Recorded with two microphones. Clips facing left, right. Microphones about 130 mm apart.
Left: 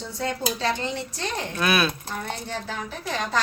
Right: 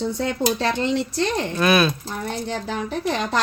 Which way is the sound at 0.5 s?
65° right (ahead or behind).